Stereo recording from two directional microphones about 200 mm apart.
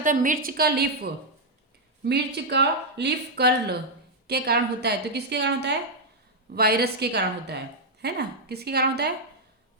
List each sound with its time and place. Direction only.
0.0 s a woman's voice: 40° right (ahead or behind)
2.0 s a woman's voice: 55° right (ahead or behind)